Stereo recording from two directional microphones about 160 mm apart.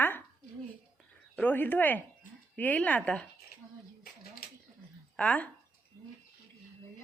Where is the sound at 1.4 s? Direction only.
10° left (ahead or behind).